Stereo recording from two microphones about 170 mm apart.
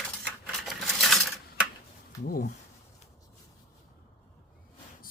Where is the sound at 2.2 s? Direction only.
55° left (ahead or behind).